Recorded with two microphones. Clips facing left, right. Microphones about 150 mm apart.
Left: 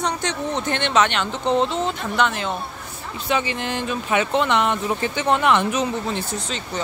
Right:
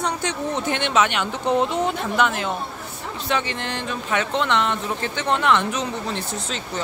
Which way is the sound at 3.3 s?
5° left (ahead or behind).